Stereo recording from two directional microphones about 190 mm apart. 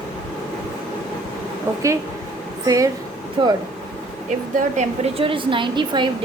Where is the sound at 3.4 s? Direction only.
25° right (ahead or behind).